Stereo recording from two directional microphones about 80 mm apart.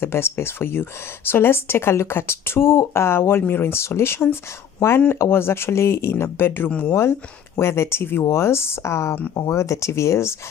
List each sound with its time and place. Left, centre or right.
0.0 s speech: left